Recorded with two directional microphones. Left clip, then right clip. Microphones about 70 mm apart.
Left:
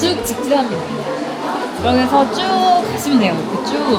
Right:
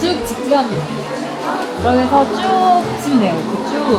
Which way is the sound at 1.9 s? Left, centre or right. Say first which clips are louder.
Right 1 dB; left.